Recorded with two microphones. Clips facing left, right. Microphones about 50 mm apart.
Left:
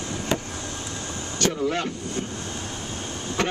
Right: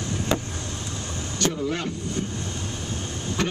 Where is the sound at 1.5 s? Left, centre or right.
Centre.